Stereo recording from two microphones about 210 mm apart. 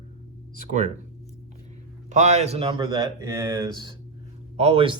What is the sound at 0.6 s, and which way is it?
Speech, 35° right (ahead or behind).